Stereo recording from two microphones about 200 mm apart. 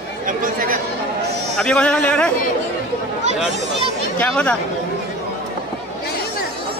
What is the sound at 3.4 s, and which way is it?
A man's voice, centre (ahead or behind).